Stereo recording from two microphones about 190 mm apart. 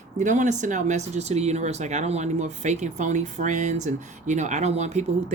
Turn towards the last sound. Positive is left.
turn(degrees=-35)  # may be behind; listen again after turning